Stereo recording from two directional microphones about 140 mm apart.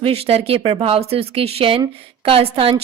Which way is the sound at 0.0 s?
45° right (ahead or behind).